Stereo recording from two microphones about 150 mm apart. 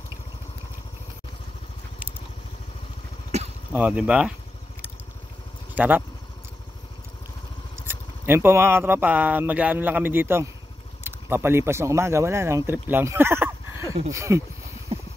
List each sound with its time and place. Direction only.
3.7 s speech: 10° right (ahead or behind)
5.8 s speech: 10° right (ahead or behind)
7.9 s speech: 15° right (ahead or behind)
12.9 s a sound: 15° right (ahead or behind)
14.1 s speech: 20° right (ahead or behind)
14.9 s a sound: 40° right (ahead or behind)